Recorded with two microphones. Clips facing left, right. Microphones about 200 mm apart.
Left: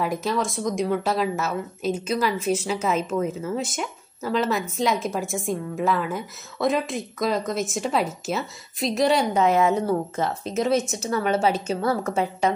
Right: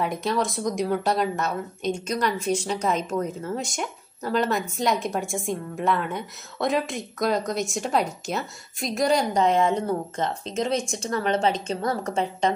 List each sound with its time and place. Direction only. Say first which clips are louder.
0.0 s speech: even; centre (ahead or behind)